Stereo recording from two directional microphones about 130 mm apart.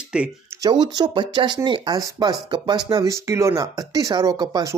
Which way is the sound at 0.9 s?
35° right (ahead or behind).